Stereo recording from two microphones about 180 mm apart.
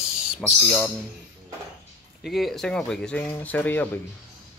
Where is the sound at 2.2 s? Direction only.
Centre (ahead or behind).